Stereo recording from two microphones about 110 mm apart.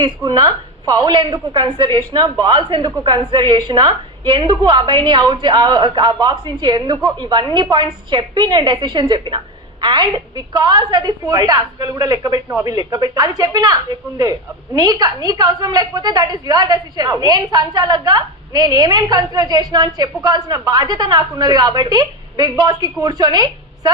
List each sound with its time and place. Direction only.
0.3 s a woman's voice: 40° right (ahead or behind)
14.8 s a woman's voice: 35° right (ahead or behind)